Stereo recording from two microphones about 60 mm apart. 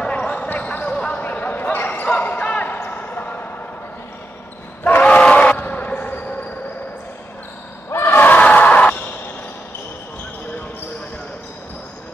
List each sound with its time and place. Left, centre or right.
0.0 s basketball bounce: centre
4.8 s battle cry: left
5.6 s basketball bounce: left
7.9 s basketball bounce: left